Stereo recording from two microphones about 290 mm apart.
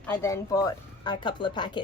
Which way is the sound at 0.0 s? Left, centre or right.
Centre.